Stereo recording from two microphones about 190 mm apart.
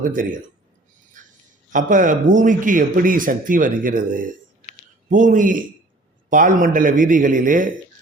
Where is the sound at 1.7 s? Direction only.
45° right (ahead or behind).